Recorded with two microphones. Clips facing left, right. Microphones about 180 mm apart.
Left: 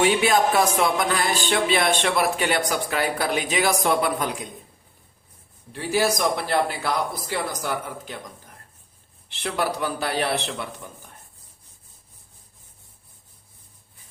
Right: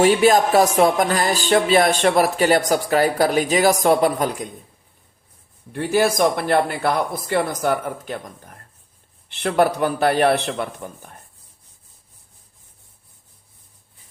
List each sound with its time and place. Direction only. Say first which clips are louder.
0.0 s music: right 5 dB; 40° right (ahead or behind)
5.7 s a man's voice: right 4 dB; 55° right (ahead or behind)
9.3 s a man's voice: right 8 dB; 55° right (ahead or behind)